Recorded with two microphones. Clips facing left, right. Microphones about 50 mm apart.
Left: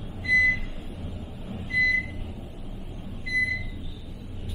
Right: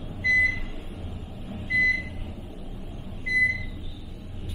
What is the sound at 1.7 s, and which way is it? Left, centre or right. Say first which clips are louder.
Vehicle: even; right.